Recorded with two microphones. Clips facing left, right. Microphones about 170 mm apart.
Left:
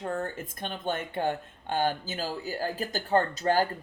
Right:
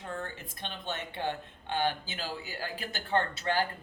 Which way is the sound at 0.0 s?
45° left (ahead or behind).